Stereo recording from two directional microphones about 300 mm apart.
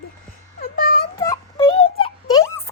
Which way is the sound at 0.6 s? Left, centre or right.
Left.